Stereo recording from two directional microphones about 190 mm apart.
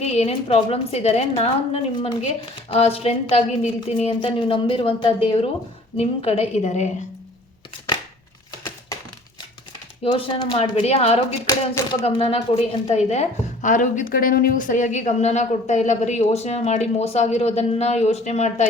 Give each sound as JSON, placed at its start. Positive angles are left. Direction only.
{"t": 0.0, "sound": "a woman's voice", "side_deg": 35}
{"t": 10.0, "sound": "speech", "side_deg": 25}
{"t": 11.4, "sound": "speech", "side_deg": 15}
{"t": 12.0, "sound": "a woman's voice", "side_deg": 30}